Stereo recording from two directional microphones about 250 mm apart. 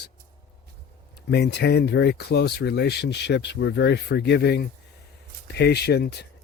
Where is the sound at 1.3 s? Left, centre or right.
Left.